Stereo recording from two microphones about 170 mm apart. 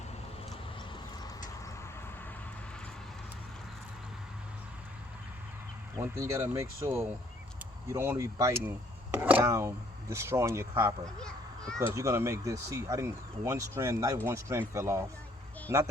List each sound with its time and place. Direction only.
6.0 s speech: 15° right (ahead or behind)
11.2 s children playing: 5° left (ahead or behind)
11.9 s speech: 15° right (ahead or behind)